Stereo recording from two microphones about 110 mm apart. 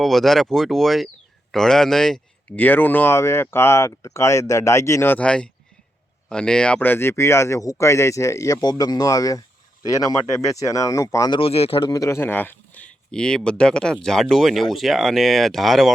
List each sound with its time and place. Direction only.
0.0 s speech: centre (ahead or behind)
2.6 s speech: 15° left (ahead or behind)
5.1 s speech: 10° left (ahead or behind); by 11.3 s 30° left (ahead or behind)
11.3 s speech: 60° left (ahead or behind)
11.8 s speech: 35° left (ahead or behind); by 15.9 s centre (ahead or behind)